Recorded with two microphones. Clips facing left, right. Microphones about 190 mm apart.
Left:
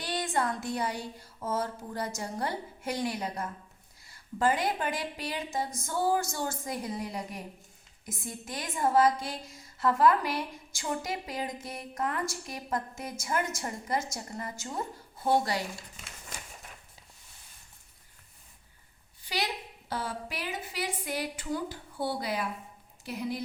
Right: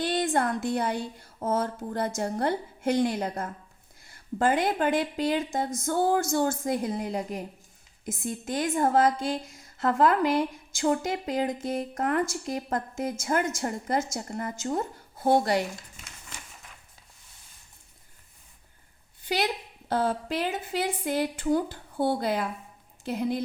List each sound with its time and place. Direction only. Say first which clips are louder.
0.0 s a woman's voice: right 5 dB; 55° right (ahead or behind)
8.4 s a woman's voice: right 5 dB; 55° right (ahead or behind)
19.9 s a woman's voice: right 9 dB; 55° right (ahead or behind)